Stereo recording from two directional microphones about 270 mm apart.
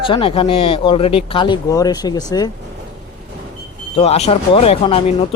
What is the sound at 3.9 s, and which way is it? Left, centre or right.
Speech, left.